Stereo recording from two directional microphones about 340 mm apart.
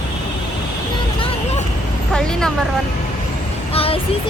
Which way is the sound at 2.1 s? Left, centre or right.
Centre.